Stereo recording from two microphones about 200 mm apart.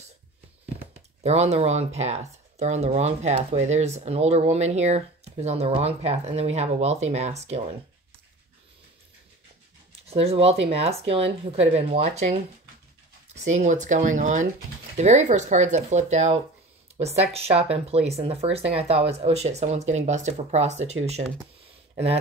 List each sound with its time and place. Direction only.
1.2 s speech: 30° right (ahead or behind)
10.0 s speech: 30° right (ahead or behind)